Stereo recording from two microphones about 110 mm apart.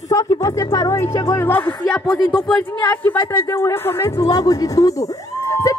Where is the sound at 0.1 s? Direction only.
30° left (ahead or behind).